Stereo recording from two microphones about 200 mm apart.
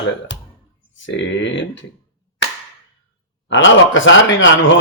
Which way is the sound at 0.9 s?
65° left (ahead or behind).